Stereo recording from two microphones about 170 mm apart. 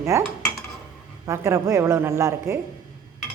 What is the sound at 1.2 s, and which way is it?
A woman's voice, 15° right (ahead or behind).